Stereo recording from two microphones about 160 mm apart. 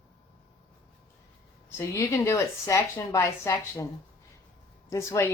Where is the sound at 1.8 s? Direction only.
15° left (ahead or behind).